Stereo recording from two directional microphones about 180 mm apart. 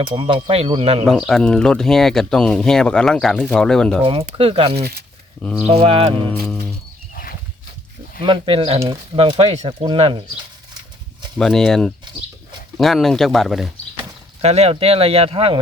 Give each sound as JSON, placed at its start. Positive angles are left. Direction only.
{"t": 0.0, "sound": "speech", "side_deg": -25}
{"t": 1.0, "sound": "speech", "side_deg": 0}
{"t": 4.0, "sound": "speech", "side_deg": -30}
{"t": 5.4, "sound": "speech", "side_deg": 5}
{"t": 5.6, "sound": "speech", "side_deg": -35}
{"t": 8.2, "sound": "speech", "side_deg": -30}
{"t": 11.3, "sound": "speech", "side_deg": 5}
{"t": 14.4, "sound": "speech", "side_deg": -35}